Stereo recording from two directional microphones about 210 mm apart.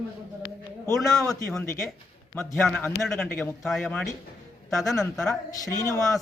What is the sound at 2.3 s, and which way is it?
Speech, 5° left (ahead or behind).